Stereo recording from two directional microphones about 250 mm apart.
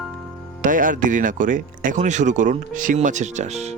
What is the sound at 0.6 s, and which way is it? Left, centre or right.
Speech, right.